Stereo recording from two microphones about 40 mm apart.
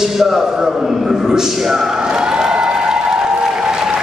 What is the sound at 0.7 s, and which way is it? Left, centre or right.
Speech, centre.